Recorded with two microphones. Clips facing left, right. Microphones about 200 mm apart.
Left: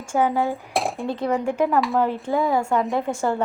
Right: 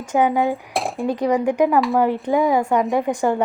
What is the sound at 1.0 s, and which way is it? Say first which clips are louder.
Speech: right 7 dB; 15° right (ahead or behind).